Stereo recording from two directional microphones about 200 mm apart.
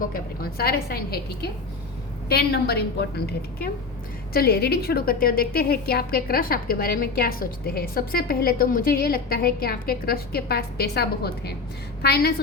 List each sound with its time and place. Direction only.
0.1 s a woman's voice: 50° left (ahead or behind)